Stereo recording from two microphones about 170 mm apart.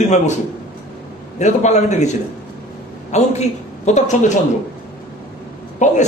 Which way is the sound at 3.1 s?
40° left (ahead or behind).